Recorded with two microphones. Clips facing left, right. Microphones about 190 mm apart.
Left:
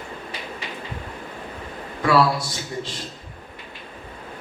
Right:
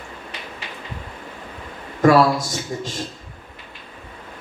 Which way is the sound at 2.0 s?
45° right (ahead or behind).